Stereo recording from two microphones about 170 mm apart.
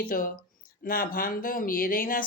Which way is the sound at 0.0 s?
55° left (ahead or behind).